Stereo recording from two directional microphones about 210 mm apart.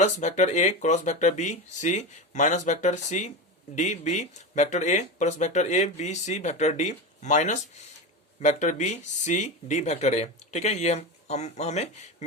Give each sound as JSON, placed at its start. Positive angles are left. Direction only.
{"t": 0.0, "sound": "speech", "side_deg": 35}